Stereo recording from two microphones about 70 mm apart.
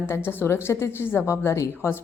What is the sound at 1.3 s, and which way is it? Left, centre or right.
Speech, left.